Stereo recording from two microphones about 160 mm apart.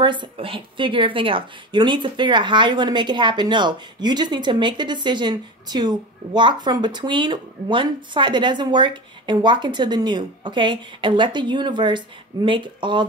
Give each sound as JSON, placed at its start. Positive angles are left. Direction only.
{"t": 0.0, "sound": "speech", "side_deg": -30}